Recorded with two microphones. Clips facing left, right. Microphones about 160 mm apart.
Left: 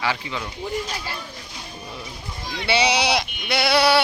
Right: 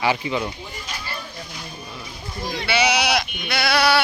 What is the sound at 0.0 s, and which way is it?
Speech, 15° right (ahead or behind).